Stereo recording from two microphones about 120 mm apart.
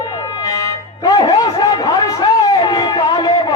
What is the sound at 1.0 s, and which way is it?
Music, 35° left (ahead or behind).